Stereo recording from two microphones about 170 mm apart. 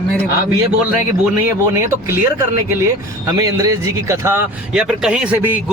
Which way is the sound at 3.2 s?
20° right (ahead or behind).